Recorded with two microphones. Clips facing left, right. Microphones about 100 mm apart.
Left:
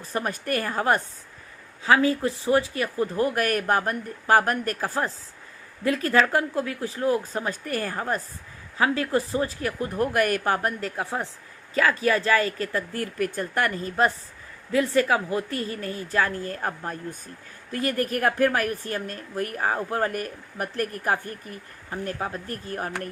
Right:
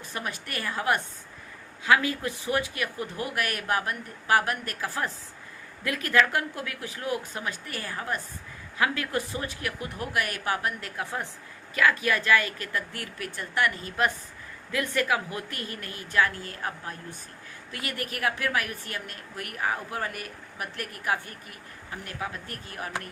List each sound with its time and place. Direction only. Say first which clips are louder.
0.0 s a woman's voice: left 6 dB; 40° left (ahead or behind)
10.9 s a woman's voice: left 4 dB; 30° left (ahead or behind)